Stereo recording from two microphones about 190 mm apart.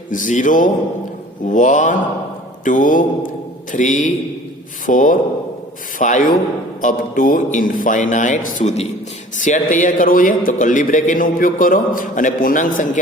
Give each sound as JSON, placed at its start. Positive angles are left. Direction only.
{"t": 0.1, "sound": "a man's voice", "side_deg": 40}
{"t": 1.5, "sound": "mantra", "side_deg": 40}
{"t": 2.6, "sound": "a man's voice", "side_deg": 45}